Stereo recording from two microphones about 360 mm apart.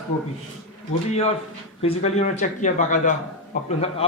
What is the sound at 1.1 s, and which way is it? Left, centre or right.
A man's voice, centre.